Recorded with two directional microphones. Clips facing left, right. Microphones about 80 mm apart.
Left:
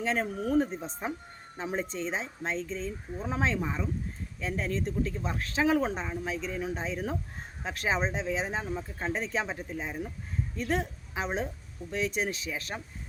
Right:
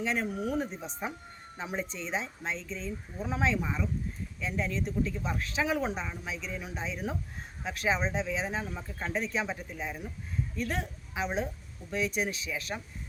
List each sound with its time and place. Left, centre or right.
0.0 s a woman's voice: left